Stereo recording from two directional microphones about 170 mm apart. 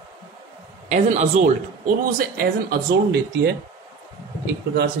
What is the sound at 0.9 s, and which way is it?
Speech, 45° right (ahead or behind).